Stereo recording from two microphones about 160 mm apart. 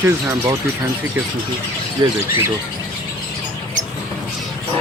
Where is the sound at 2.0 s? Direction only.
25° right (ahead or behind).